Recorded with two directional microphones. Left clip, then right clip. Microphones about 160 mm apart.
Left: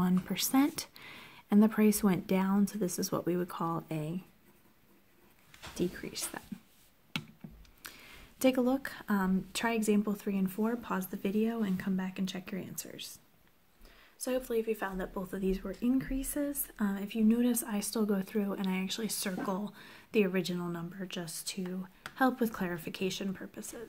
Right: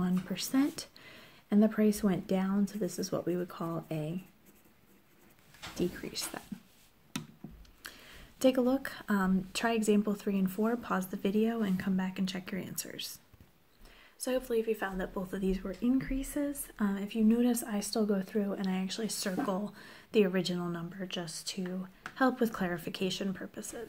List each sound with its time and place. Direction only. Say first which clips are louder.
0.0 s speech: left 3 dB; 35° left (ahead or behind)
5.8 s speech: right 1 dB; 20° left (ahead or behind)
7.8 s speech: right 1 dB; 25° left (ahead or behind)
14.2 s speech: right 1 dB; 10° left (ahead or behind)